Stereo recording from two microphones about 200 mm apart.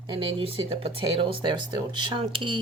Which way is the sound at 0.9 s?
25° right (ahead or behind).